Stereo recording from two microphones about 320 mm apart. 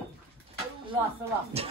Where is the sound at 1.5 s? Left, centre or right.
Centre.